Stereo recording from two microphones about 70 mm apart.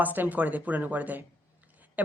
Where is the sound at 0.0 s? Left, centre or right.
Right.